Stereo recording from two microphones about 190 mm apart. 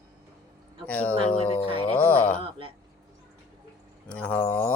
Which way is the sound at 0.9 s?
5° left (ahead or behind).